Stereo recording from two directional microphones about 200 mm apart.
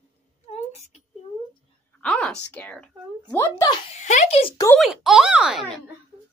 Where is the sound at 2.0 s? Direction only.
5° left (ahead or behind).